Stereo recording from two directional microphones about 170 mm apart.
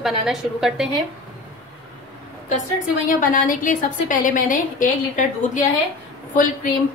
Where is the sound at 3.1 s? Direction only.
50° left (ahead or behind).